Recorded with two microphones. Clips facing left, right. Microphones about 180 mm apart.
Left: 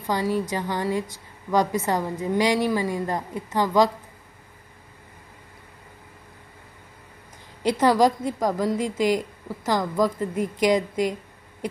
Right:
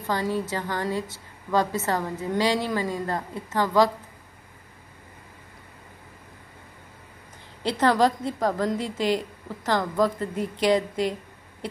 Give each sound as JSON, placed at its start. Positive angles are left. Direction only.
{"t": 0.0, "sound": "a woman's voice", "side_deg": 15}
{"t": 7.6, "sound": "a woman's voice", "side_deg": 10}